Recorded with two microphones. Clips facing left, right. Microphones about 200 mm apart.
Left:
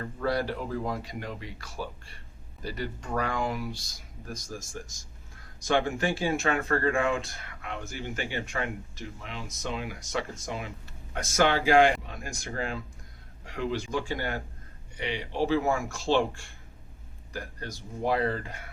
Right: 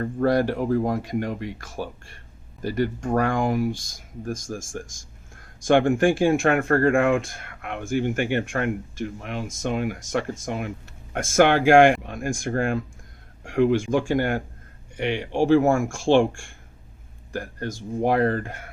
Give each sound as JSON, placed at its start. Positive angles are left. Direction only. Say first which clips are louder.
{"t": 0.0, "sound": "speech", "louder": "right 8 dB", "side_deg": -50}